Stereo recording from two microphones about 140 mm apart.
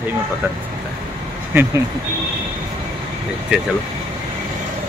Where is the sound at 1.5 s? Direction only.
15° right (ahead or behind).